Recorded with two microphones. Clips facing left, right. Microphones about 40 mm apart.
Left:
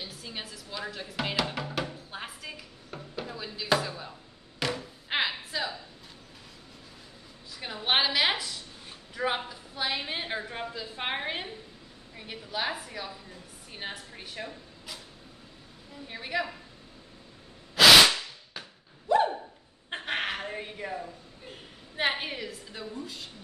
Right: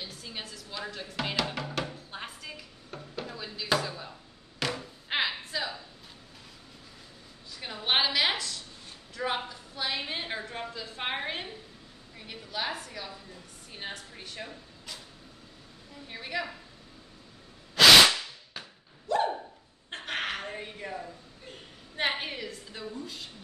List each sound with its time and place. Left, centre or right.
0.0 s music: centre
4.6 s a sound: centre
7.5 s a woman's voice: centre
16.1 s a woman's voice: centre
17.7 s whip: centre
19.1 s a sound: centre
19.9 s speech: centre